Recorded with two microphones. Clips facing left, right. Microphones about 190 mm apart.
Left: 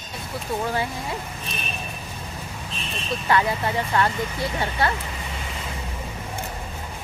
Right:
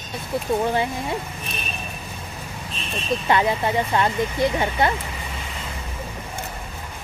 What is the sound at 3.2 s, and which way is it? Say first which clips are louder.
Speech: right 1 dB; 20° right (ahead or behind).